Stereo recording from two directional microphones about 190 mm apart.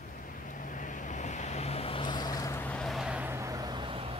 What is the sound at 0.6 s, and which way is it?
Vehicle, 45° left (ahead or behind).